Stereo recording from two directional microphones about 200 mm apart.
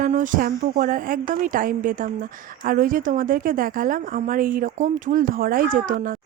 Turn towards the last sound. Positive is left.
turn(degrees=-40)  # may be behind; listen again after turning